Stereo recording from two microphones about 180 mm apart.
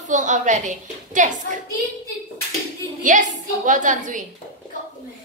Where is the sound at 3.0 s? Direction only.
45° right (ahead or behind).